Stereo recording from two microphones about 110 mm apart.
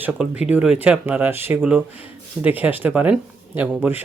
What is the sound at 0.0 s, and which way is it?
Speech, 10° right (ahead or behind).